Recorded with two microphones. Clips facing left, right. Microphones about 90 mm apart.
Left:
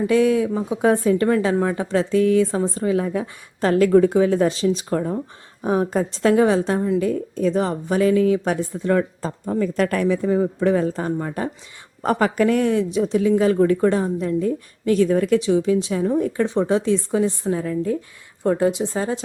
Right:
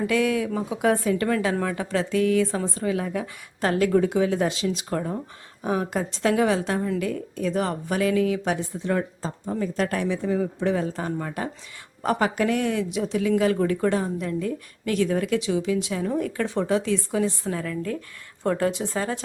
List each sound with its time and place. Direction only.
0.1 s a woman's voice: 30° left (ahead or behind)